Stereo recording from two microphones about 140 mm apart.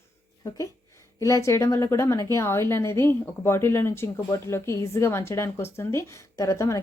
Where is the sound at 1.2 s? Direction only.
20° left (ahead or behind).